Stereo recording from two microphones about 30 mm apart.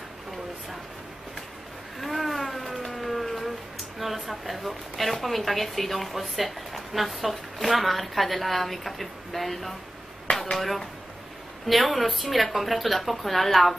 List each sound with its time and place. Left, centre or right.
2.0 s a sound: centre
4.0 s a woman's voice: centre
10.3 s chop: centre
10.6 s a woman's voice: centre